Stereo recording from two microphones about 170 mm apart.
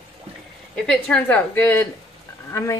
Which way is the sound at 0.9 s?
5° left (ahead or behind).